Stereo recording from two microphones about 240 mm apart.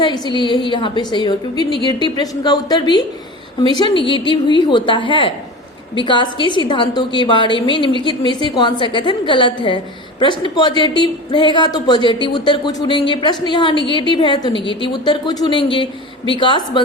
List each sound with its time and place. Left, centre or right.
0.0 s a woman's voice: centre